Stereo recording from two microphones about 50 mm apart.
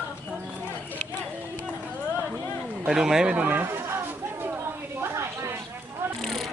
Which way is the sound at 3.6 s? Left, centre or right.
Right.